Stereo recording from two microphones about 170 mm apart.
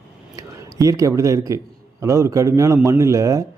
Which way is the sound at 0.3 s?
20° right (ahead or behind).